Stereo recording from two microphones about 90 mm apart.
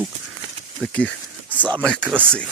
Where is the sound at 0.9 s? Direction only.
15° left (ahead or behind).